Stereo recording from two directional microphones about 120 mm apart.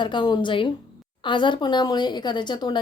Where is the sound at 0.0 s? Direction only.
40° left (ahead or behind).